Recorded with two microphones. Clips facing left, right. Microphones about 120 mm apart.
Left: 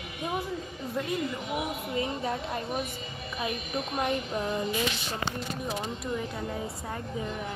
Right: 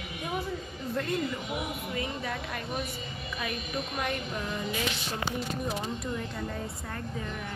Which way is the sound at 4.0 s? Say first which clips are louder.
Left 6 dB; 25° left (ahead or behind).